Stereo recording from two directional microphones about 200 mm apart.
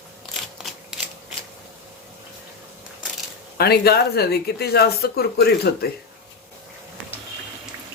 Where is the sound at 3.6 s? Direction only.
50° left (ahead or behind).